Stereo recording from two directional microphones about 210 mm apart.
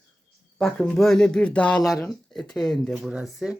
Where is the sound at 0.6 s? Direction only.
5° left (ahead or behind).